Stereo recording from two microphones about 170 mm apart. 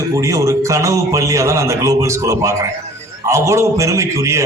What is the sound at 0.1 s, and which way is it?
A man's voice, 20° right (ahead or behind).